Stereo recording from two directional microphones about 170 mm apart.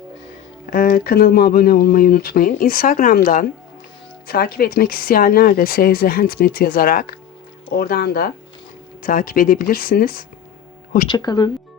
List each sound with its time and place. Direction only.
0.7 s speech: 55° left (ahead or behind)
9.0 s speech: 55° left (ahead or behind)
11.1 s speech: 25° left (ahead or behind)